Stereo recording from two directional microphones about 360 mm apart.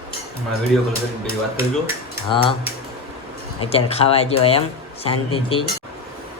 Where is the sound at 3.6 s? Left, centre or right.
Centre.